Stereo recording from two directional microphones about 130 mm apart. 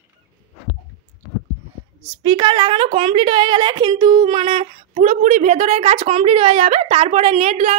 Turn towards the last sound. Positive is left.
turn(degrees=-55)  # may be behind; listen again after turning